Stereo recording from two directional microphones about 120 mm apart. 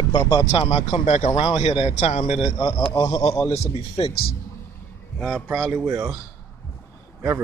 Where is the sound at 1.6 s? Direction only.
50° left (ahead or behind).